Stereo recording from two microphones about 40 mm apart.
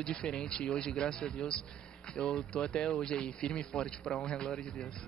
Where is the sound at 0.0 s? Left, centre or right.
Centre.